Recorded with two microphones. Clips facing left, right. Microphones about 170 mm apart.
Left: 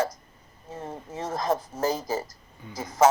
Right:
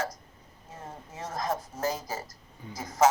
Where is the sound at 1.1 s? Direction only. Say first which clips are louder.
Left 5 dB; 30° left (ahead or behind).